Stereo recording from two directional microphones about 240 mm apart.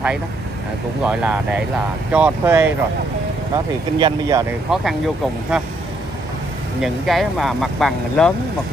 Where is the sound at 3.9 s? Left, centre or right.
Centre.